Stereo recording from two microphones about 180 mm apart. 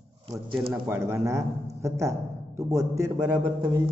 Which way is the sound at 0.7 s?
10° right (ahead or behind).